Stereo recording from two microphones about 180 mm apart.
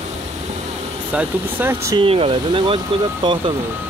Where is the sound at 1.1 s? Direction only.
10° right (ahead or behind).